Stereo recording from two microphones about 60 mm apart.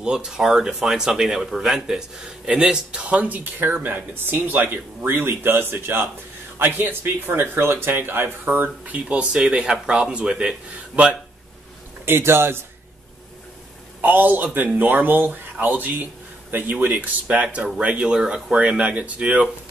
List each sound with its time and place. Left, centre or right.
0.0 s speech: centre
12.1 s a man's voice: right
14.0 s speech: right